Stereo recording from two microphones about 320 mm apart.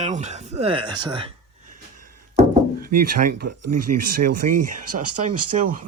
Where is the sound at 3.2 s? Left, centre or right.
Right.